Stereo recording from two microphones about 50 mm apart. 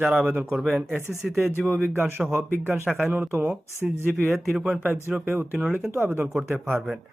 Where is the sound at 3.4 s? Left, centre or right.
Right.